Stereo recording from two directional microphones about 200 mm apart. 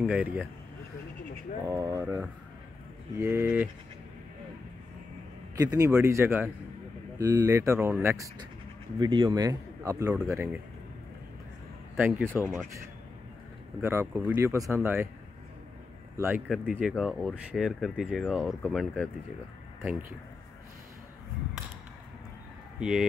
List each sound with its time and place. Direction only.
0.0 s speech: 5° right (ahead or behind)
1.7 s speech: 20° right (ahead or behind)
5.6 s a man's voice: 15° right (ahead or behind)
12.0 s speech: 10° right (ahead or behind)
16.2 s speech: 10° right (ahead or behind)
19.8 s speech: 10° right (ahead or behind)
22.8 s speech: 5° right (ahead or behind)